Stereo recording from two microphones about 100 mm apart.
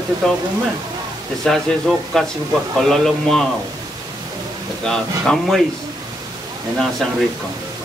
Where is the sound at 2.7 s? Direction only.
5° left (ahead or behind).